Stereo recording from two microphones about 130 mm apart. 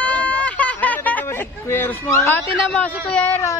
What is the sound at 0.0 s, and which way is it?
Hubbub, 10° left (ahead or behind).